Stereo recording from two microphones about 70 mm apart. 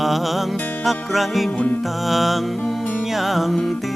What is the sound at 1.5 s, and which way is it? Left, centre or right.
Music, left.